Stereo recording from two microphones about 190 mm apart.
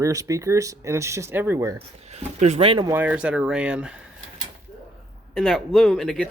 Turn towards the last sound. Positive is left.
turn(degrees=5)  # may be behind; listen again after turning